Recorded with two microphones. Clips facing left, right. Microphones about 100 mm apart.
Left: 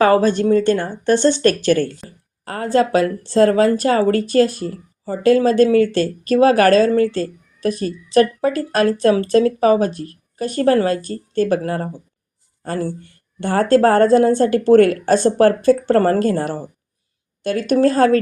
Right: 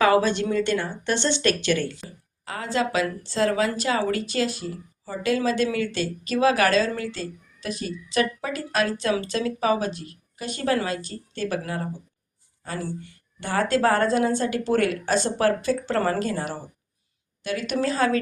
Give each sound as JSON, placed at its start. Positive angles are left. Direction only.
{"t": 0.0, "sound": "speech", "side_deg": 40}